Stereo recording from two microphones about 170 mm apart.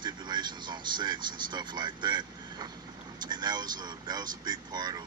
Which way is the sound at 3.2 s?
25° right (ahead or behind).